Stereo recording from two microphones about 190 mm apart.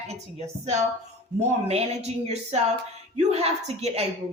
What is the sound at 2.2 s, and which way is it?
Speech, 35° right (ahead or behind).